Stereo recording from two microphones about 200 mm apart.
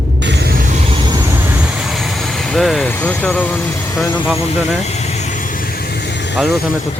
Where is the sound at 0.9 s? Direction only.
25° right (ahead or behind); by 4.1 s 15° left (ahead or behind).